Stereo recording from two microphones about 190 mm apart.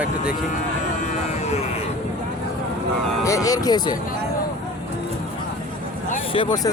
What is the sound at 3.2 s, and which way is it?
Speech, 15° left (ahead or behind).